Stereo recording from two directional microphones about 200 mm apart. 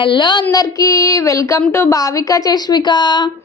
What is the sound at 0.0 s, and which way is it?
A woman's voice, 25° left (ahead or behind).